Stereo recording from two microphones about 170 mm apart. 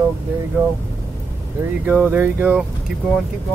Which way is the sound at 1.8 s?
10° right (ahead or behind).